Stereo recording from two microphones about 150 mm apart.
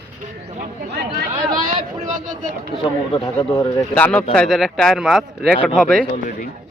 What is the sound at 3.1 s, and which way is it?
Speech, 25° left (ahead or behind).